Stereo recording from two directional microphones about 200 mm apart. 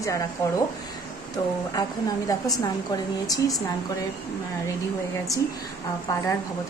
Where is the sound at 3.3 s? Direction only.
15° left (ahead or behind).